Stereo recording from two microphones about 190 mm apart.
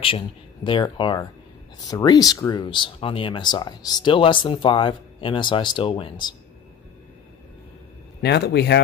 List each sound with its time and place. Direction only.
0.7 s speech: 25° left (ahead or behind)
8.2 s speech: 60° left (ahead or behind)